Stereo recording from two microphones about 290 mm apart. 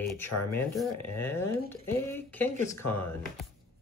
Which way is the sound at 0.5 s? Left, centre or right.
Centre.